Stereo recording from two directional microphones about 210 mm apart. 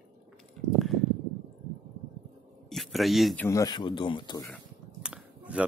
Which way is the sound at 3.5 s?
15° left (ahead or behind).